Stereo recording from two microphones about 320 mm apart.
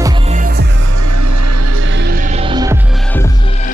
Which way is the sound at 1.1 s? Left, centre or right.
Right.